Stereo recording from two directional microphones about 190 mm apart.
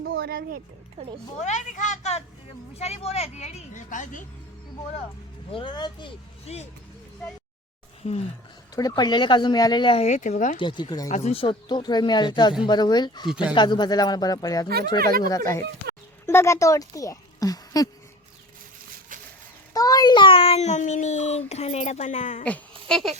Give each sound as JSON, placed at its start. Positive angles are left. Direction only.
{"t": 0.0, "sound": "a sound", "side_deg": -55}
{"t": 1.4, "sound": "a child's voice", "side_deg": 40}
{"t": 5.5, "sound": "speech", "side_deg": 25}
{"t": 8.0, "sound": "a child's voice", "side_deg": 40}
{"t": 8.7, "sound": "speech", "side_deg": 20}
{"t": 10.6, "sound": "speech", "side_deg": 25}
{"t": 11.1, "sound": "speech", "side_deg": 35}
{"t": 14.9, "sound": "speech", "side_deg": -50}
{"t": 15.2, "sound": "speech", "side_deg": 20}
{"t": 19.7, "sound": "a child's voice", "side_deg": 20}
{"t": 22.9, "sound": "speech", "side_deg": 0}